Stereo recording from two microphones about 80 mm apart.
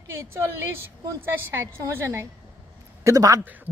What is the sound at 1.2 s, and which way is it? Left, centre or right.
A woman's voice, right.